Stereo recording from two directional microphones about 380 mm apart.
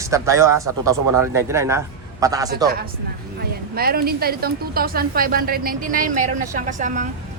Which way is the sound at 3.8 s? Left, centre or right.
Right.